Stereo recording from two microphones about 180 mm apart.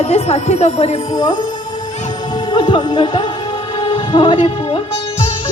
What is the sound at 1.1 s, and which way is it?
Music, 25° left (ahead or behind).